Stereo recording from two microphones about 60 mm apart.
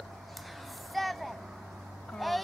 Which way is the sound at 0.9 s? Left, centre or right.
Centre.